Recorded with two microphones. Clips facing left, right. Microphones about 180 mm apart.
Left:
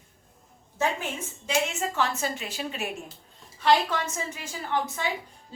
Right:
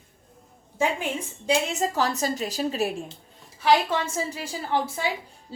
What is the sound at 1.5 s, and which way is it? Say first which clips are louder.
A woman's voice: right 4 dB; 35° right (ahead or behind).